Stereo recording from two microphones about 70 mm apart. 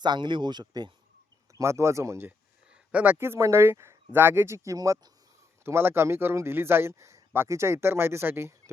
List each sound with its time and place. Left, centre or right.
0.0 s speech: right
1.5 s speech: right
2.9 s speech: right
5.6 s speech: right